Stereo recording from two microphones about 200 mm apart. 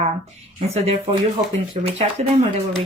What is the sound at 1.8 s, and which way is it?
Speech, 30° right (ahead or behind).